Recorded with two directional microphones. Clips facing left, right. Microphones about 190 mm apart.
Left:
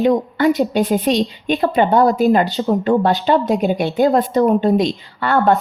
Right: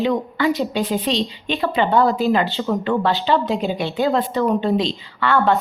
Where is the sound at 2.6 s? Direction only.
35° left (ahead or behind).